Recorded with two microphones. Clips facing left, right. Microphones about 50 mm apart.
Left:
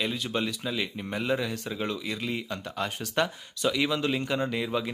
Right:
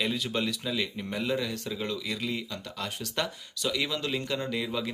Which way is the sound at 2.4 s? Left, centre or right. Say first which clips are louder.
Left 4 dB; left.